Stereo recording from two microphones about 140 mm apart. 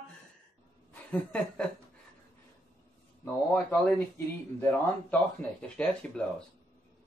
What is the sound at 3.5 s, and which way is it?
Speech, 15° left (ahead or behind).